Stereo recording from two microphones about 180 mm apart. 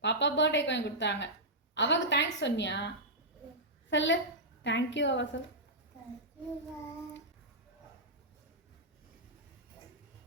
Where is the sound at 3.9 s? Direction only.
90° left.